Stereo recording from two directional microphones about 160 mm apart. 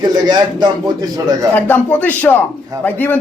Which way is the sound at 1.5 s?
10° left (ahead or behind).